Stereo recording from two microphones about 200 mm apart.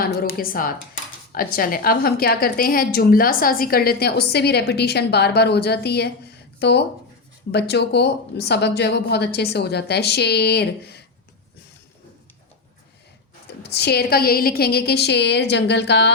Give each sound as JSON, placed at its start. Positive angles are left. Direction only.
{"t": 0.0, "sound": "a woman's voice", "side_deg": 50}
{"t": 13.7, "sound": "speech", "side_deg": 55}